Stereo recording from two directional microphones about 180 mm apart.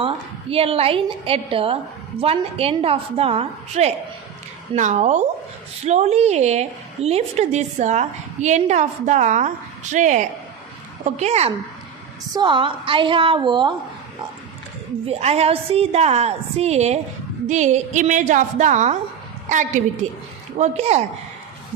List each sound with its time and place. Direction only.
0.5 s a woman's voice: 30° right (ahead or behind)
12.3 s a woman's voice: 25° right (ahead or behind)
15.0 s a woman's voice: 35° right (ahead or behind)